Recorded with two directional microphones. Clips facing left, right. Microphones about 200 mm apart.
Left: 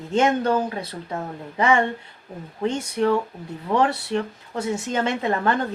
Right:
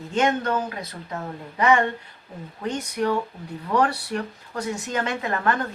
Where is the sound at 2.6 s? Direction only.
25° left (ahead or behind).